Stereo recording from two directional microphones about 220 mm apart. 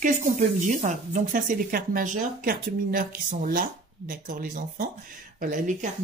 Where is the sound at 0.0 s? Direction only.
35° right (ahead or behind).